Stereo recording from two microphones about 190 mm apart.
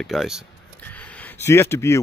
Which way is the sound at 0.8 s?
10° left (ahead or behind).